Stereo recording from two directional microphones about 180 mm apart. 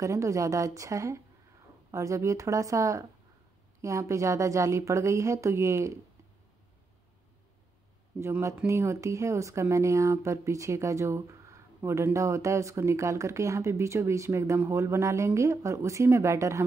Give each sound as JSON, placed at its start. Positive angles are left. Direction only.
{"t": 0.0, "sound": "speech", "side_deg": -15}
{"t": 8.2, "sound": "speech", "side_deg": -15}